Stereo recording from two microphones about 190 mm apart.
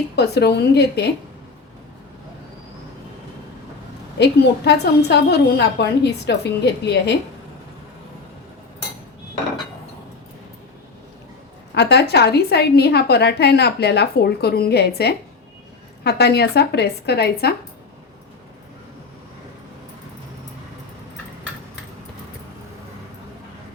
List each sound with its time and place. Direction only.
0.2 s a woman's voice: 60° left (ahead or behind)
4.2 s a woman's voice: 60° left (ahead or behind)
11.7 s a woman's voice: 60° left (ahead or behind)